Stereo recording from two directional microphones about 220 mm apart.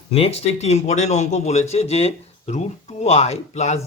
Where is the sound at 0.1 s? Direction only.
25° left (ahead or behind).